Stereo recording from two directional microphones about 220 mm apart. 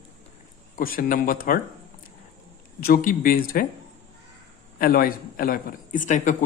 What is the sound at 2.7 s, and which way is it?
Speech, 40° left (ahead or behind).